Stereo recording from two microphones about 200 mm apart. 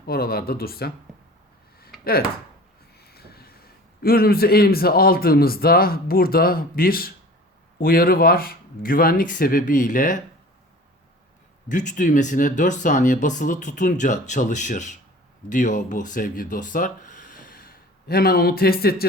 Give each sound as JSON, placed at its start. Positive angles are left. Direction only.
{"t": 0.0, "sound": "speech", "side_deg": 50}
{"t": 3.0, "sound": "a man's voice", "side_deg": 50}
{"t": 11.7, "sound": "speech", "side_deg": 40}